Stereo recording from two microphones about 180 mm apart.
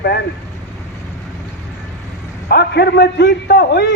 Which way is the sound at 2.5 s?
60° left (ahead or behind).